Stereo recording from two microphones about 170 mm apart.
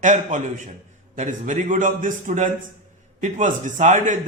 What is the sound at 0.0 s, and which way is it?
A man's voice, 45° right (ahead or behind).